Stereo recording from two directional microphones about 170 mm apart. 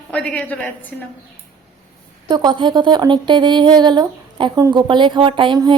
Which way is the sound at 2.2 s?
25° right (ahead or behind).